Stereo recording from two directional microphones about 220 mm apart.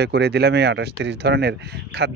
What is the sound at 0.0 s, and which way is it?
Speech, 50° right (ahead or behind).